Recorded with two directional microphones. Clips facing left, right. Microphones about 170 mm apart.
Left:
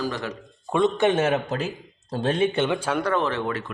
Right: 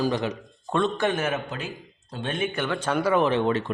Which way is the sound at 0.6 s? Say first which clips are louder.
Left 4 dB; 15° left (ahead or behind).